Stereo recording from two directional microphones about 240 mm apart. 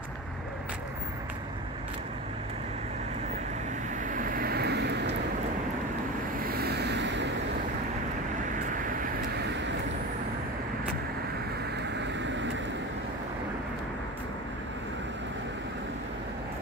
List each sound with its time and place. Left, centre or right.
4.0 s vehicle: right
6.4 s vehicle: right